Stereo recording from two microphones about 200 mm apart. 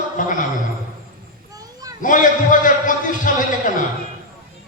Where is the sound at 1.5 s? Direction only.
20° right (ahead or behind).